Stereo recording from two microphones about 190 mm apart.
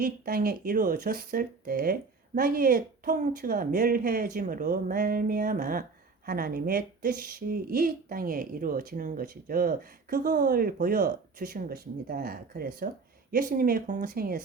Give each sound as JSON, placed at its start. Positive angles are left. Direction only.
{"t": 0.0, "sound": "speech", "side_deg": -50}